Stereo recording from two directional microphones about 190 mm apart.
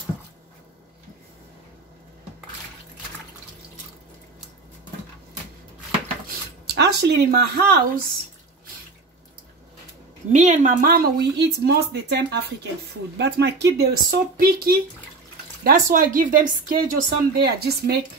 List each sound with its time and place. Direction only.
6.6 s speech: 60° right (ahead or behind)
10.3 s speech: 40° right (ahead or behind)